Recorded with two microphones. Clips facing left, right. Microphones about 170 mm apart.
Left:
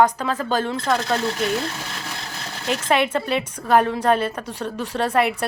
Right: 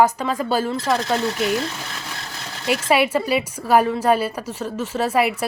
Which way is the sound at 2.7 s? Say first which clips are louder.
Right 2 dB; 10° right (ahead or behind).